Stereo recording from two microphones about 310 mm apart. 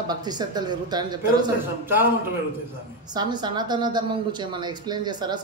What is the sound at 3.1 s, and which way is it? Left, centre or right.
A woman's voice, centre.